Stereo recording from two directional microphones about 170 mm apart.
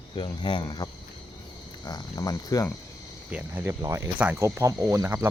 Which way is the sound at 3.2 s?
5° right (ahead or behind).